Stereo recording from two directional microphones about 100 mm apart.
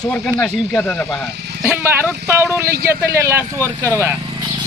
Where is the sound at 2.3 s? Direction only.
25° right (ahead or behind).